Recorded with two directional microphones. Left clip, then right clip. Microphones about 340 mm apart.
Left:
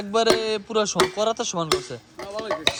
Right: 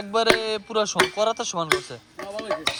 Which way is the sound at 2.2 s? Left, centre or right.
Centre.